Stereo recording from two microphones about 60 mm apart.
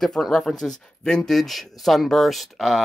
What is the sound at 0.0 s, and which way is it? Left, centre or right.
Speech, centre.